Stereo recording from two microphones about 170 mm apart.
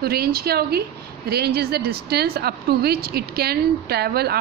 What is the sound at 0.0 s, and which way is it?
Speech, 65° right (ahead or behind).